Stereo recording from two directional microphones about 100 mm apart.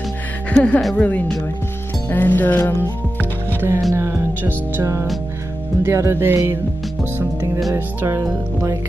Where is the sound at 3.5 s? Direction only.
30° right (ahead or behind).